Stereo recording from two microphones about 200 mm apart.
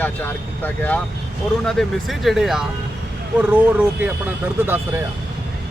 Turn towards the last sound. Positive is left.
turn(degrees=-10)  # may be behind; listen again after turning